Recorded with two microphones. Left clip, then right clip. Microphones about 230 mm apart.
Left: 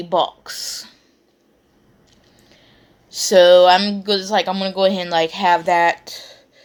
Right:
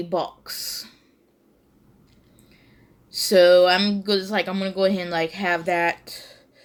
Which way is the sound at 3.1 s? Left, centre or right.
Centre.